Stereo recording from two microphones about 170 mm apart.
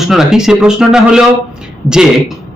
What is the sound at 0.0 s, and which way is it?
Speech, centre (ahead or behind).